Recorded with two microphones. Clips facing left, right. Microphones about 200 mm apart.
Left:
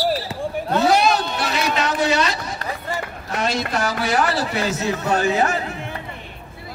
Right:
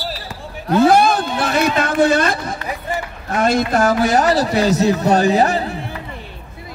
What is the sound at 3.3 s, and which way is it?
A man's voice, 50° right (ahead or behind).